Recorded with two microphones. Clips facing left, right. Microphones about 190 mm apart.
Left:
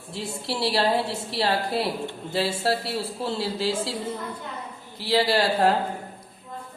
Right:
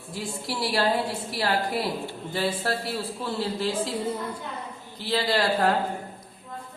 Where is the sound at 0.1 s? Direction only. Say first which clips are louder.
Left 2 dB; 25° left (ahead or behind).